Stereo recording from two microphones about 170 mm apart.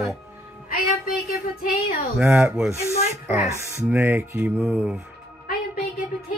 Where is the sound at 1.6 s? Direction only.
60° left (ahead or behind).